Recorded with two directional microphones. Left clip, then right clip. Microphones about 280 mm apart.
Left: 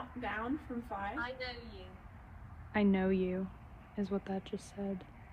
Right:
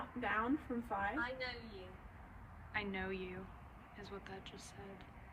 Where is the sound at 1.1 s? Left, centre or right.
Centre.